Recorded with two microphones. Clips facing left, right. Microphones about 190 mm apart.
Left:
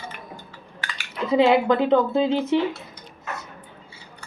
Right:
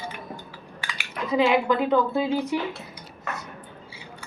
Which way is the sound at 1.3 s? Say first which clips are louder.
Left 4 dB; 30° left (ahead or behind).